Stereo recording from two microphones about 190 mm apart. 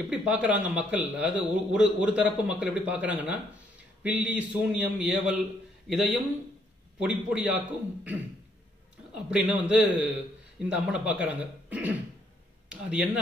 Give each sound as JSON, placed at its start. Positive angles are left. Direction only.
{"t": 0.1, "sound": "a man's voice", "side_deg": -5}